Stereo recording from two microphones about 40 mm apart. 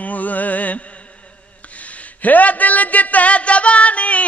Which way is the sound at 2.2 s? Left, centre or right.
Left.